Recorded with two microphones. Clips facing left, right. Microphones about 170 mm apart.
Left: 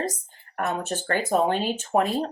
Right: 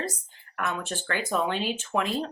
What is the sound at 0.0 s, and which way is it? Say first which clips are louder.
Speech: left 4 dB; 40° left (ahead or behind).